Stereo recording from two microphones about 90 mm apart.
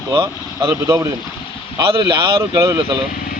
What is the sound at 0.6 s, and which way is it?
Speech, 35° right (ahead or behind).